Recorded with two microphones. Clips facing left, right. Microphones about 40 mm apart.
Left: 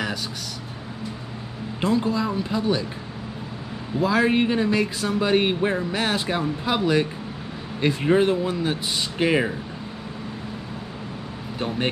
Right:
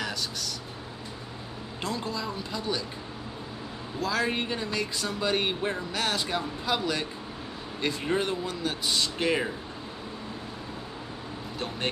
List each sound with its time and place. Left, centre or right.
1.8 s speech: centre
4.0 s speech: centre